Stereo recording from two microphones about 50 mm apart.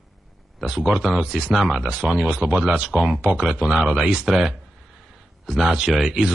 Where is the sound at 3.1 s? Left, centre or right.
Right.